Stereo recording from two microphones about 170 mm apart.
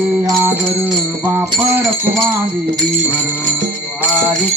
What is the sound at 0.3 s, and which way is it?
Music, 20° right (ahead or behind).